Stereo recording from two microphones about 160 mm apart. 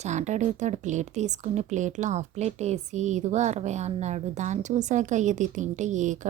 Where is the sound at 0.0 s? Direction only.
45° right (ahead or behind).